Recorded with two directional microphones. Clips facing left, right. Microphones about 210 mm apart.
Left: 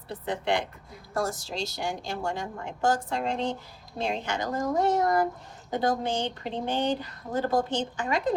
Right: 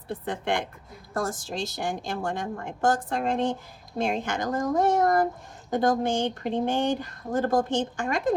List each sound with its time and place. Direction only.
0.1 s speech: 50° right (ahead or behind)